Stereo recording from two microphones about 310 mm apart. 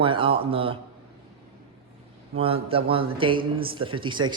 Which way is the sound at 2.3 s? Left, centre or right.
Centre.